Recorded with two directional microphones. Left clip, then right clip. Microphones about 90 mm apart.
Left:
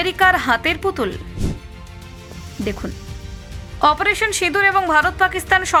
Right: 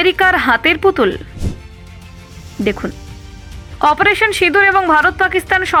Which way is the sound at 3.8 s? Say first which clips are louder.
Right 4 dB; 35° right (ahead or behind).